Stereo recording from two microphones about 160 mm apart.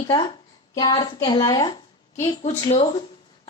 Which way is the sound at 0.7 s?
25° left (ahead or behind).